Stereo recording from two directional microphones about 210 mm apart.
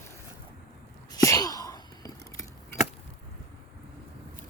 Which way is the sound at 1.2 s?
15° left (ahead or behind).